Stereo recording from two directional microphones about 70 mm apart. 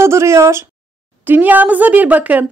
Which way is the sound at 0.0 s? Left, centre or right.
Right.